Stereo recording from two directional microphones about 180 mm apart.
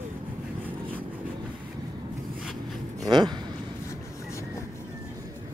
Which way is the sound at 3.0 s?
25° right (ahead or behind).